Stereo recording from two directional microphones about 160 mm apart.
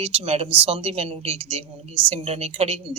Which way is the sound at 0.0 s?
40° right (ahead or behind).